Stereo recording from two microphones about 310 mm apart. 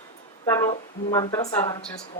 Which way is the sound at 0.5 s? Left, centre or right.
Centre.